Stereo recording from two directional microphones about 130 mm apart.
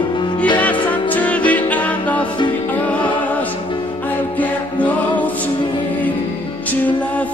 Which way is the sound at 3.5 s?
40° left (ahead or behind).